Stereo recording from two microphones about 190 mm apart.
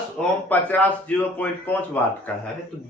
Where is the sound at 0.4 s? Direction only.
10° left (ahead or behind).